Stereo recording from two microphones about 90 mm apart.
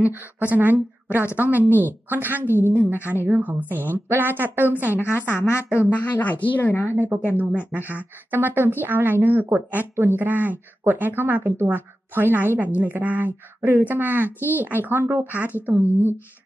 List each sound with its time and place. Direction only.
0.0 s a woman's voice: 20° right (ahead or behind)
2.4 s a woman's voice: 25° left (ahead or behind)
2.7 s a woman's voice: 25° right (ahead or behind)
5.2 s a woman's voice: 20° left (ahead or behind)
7.0 s a woman's voice: 20° right (ahead or behind)